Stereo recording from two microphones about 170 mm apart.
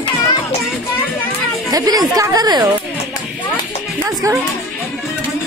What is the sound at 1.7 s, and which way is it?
Speech, 20° right (ahead or behind).